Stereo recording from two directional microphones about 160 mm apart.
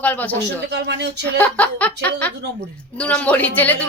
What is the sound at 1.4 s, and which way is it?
A man's voice, 10° left (ahead or behind).